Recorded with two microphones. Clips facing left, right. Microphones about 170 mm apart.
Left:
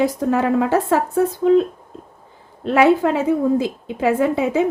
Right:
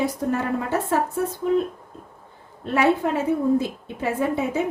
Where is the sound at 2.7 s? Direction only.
90° left.